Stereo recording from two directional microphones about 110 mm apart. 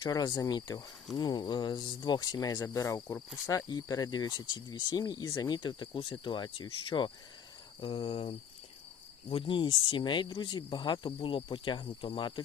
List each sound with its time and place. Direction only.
0.0 s speech: 40° left (ahead or behind)
7.8 s cricket: 55° left (ahead or behind)
9.3 s speech: 50° left (ahead or behind)